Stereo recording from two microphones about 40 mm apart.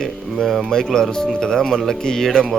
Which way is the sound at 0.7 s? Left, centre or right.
Centre.